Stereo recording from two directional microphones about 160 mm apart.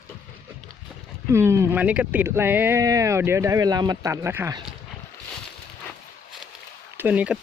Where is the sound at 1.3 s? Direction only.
15° right (ahead or behind).